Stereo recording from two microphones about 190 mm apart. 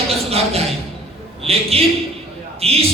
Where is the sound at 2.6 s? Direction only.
30° right (ahead or behind).